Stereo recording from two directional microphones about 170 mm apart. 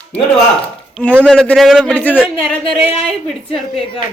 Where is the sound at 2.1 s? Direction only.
5° right (ahead or behind).